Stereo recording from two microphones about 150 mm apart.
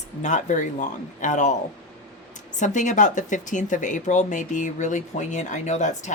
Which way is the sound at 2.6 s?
55° left (ahead or behind).